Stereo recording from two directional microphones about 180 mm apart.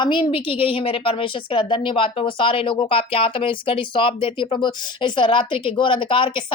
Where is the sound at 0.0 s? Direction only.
25° left (ahead or behind).